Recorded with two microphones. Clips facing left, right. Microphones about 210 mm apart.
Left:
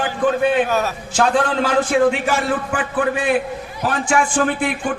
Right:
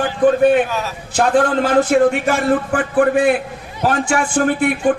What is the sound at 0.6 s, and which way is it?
Speech, 50° left (ahead or behind).